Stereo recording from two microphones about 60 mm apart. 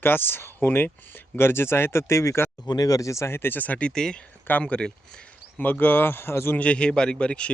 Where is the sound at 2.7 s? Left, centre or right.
Left.